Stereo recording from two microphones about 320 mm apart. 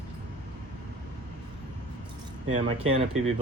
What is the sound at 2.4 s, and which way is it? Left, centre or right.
Speech, right.